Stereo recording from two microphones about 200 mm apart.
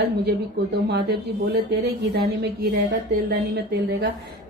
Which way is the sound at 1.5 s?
55° right (ahead or behind).